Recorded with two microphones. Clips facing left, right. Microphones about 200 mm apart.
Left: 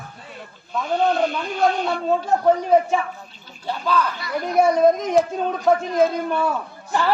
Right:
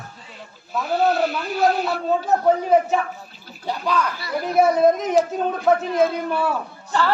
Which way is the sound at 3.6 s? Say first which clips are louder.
Left 1 dB; 15° right (ahead or behind).